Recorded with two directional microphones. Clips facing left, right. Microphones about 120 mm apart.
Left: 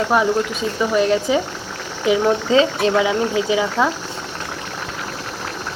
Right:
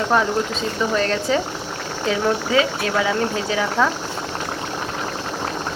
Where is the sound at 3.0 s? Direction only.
15° left (ahead or behind).